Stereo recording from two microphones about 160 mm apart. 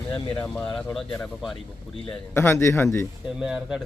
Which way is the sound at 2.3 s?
15° left (ahead or behind).